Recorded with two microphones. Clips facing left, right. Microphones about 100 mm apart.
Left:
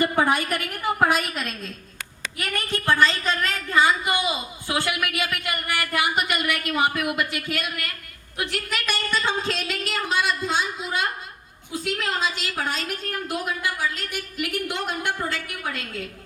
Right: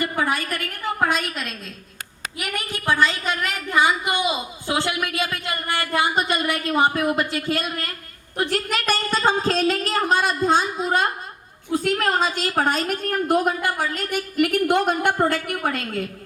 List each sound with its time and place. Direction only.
0.0 s a woman's voice: 20° left (ahead or behind); by 16.0 s 50° right (ahead or behind)